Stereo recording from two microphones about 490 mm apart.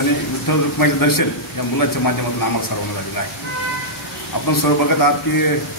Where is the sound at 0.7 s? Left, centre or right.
Left.